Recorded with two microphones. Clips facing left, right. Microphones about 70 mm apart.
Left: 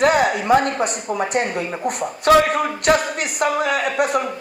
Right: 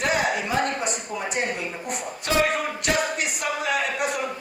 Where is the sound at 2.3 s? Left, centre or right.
Left.